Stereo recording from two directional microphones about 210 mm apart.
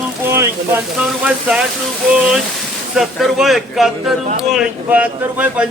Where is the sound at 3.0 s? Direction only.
Centre (ahead or behind).